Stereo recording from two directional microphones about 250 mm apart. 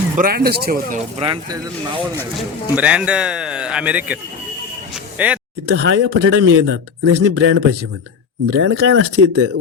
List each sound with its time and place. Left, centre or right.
0.2 s speech: right
1.2 s speech: centre
2.7 s a man's voice: centre
5.7 s speech: right